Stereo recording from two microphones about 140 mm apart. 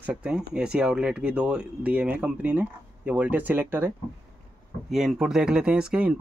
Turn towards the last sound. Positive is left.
turn(degrees=-5)  # may be behind; listen again after turning